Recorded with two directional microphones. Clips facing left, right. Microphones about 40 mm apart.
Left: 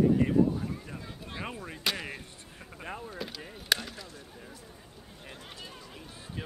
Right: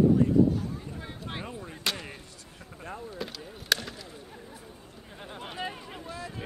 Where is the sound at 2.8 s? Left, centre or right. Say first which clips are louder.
Even; left.